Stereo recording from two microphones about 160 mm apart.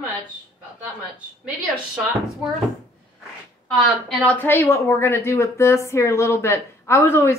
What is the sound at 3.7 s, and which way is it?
A woman's voice, 10° left (ahead or behind).